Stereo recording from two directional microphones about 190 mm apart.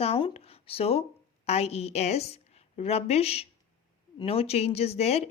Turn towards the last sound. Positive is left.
turn(degrees=35)  # may be behind; listen again after turning